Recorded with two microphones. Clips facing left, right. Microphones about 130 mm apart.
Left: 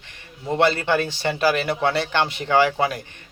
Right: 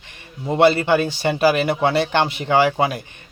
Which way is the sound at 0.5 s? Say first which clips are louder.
Right 4 dB; 15° right (ahead or behind).